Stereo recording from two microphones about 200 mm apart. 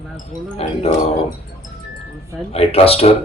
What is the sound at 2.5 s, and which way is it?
Speech, 30° left (ahead or behind).